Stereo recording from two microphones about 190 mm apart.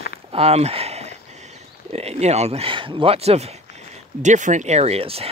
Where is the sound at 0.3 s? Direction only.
35° right (ahead or behind).